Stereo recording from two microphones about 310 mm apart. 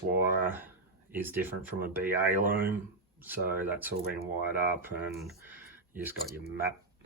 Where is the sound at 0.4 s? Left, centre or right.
Centre.